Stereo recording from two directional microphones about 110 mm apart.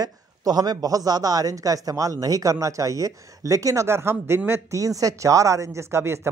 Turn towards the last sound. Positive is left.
turn(degrees=-25)  # may be behind; listen again after turning